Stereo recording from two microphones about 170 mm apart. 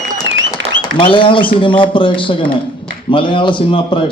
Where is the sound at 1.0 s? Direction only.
30° left (ahead or behind).